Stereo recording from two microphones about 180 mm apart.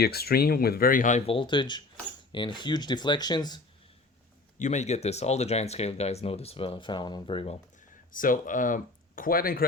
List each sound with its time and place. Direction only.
0.0 s speech: 60° left (ahead or behind)
1.3 s speech: 25° left (ahead or behind)
4.6 s speech: 40° left (ahead or behind)
8.1 s speech: 50° left (ahead or behind)